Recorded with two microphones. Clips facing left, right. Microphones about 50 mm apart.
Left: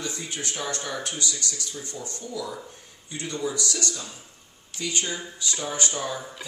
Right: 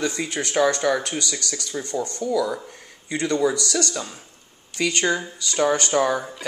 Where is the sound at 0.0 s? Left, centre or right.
Right.